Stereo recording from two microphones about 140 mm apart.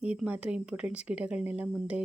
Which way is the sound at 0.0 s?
10° right (ahead or behind).